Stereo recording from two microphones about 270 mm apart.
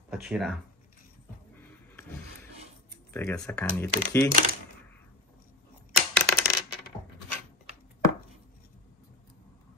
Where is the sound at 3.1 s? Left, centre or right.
Centre.